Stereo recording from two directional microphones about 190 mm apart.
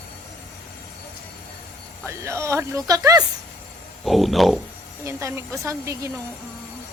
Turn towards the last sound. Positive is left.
turn(degrees=-15)  # may be behind; listen again after turning